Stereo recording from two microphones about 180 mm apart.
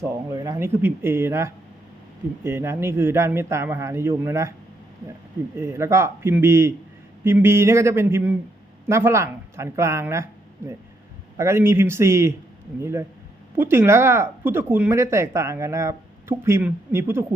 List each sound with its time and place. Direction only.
0.0 s speech: 20° right (ahead or behind)
5.5 s speech: 15° right (ahead or behind)